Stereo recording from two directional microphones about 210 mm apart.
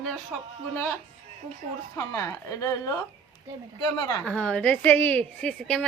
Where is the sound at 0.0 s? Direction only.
Centre (ahead or behind).